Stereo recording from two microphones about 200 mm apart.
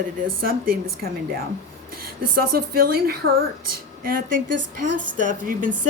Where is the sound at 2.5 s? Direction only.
50° right (ahead or behind).